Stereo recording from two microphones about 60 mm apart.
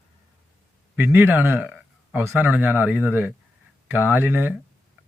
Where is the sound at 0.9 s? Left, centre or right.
Right.